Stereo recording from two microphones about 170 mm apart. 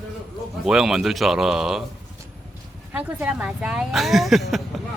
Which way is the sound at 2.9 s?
10° right (ahead or behind).